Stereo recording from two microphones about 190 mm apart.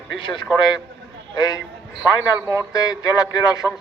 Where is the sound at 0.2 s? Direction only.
25° left (ahead or behind).